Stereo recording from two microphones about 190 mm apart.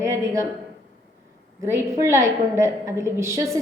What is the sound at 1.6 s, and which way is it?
A woman's voice, 15° right (ahead or behind).